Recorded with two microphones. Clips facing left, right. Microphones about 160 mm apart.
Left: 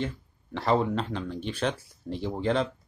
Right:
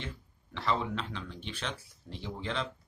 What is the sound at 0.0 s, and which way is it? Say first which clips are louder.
Speech: left 10 dB; 45° left (ahead or behind).